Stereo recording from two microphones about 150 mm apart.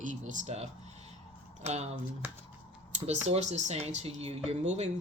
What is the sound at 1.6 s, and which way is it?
Speech, 45° right (ahead or behind).